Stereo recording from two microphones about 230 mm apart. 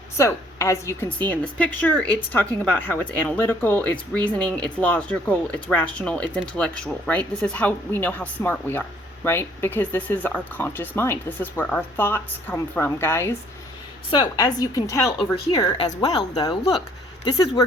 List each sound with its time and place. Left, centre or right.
0.2 s speech: centre